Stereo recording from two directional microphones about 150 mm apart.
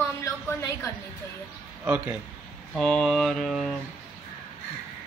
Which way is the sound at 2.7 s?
5° left (ahead or behind).